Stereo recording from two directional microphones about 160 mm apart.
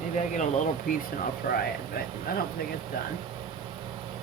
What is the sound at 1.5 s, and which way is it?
Speech, 75° left (ahead or behind).